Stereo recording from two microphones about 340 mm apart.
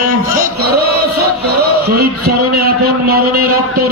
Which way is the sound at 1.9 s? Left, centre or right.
Right.